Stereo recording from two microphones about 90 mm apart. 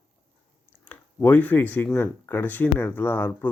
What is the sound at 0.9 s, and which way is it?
Speech, 20° left (ahead or behind).